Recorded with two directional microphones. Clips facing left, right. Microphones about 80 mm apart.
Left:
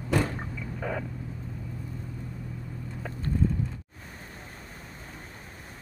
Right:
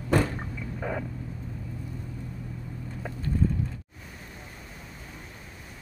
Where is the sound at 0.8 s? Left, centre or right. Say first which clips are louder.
Even; centre.